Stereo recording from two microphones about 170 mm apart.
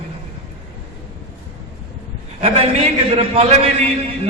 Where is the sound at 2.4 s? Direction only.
35° right (ahead or behind).